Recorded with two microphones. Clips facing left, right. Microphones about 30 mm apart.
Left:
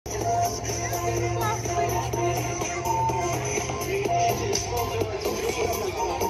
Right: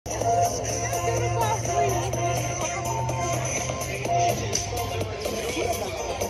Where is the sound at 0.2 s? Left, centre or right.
Centre.